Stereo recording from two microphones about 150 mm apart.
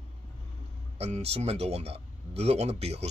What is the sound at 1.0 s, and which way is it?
Speech, 45° right (ahead or behind).